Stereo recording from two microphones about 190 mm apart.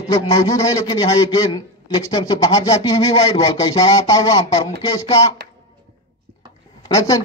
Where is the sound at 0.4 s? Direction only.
15° left (ahead or behind).